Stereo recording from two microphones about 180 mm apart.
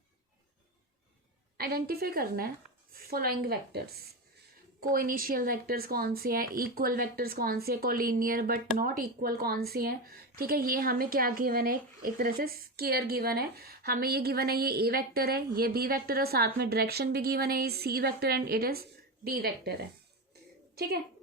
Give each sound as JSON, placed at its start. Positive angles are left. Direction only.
{"t": 1.5, "sound": "speech", "side_deg": -60}